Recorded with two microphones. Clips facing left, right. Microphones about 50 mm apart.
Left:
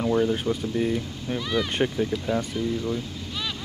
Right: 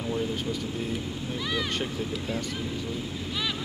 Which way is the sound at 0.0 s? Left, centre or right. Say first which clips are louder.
Left 7 dB; left.